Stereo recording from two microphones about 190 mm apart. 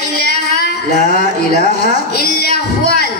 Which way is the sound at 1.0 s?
40° right (ahead or behind).